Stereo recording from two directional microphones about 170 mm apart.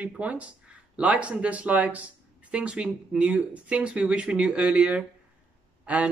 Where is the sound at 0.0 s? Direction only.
10° right (ahead or behind).